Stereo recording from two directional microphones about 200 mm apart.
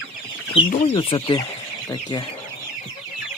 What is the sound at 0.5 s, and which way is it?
Speech, 25° left (ahead or behind).